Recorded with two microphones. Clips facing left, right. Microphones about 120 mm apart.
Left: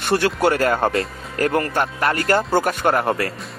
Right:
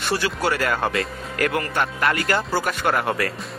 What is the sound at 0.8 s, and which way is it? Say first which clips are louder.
Speech: left 3 dB; 35° left (ahead or behind).